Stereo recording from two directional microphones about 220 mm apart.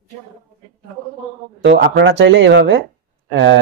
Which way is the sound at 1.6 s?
55° right (ahead or behind).